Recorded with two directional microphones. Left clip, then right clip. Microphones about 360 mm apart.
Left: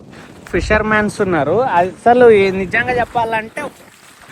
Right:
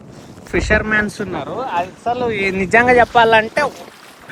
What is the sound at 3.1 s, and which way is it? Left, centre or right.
Speech, right.